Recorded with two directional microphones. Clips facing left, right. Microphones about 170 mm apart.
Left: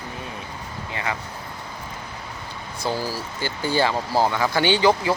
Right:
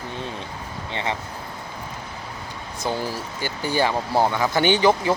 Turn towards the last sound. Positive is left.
turn(degrees=-20)  # may be behind; listen again after turning